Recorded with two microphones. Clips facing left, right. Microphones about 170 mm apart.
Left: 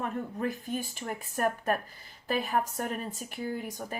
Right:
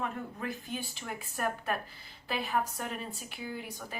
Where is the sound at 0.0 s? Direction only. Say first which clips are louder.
Left 4 dB; 45° left (ahead or behind).